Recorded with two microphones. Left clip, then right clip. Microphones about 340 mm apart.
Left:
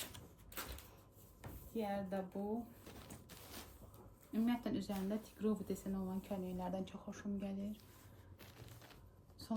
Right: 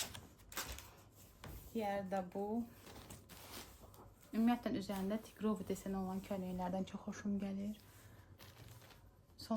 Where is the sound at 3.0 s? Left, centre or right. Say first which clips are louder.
Even; centre.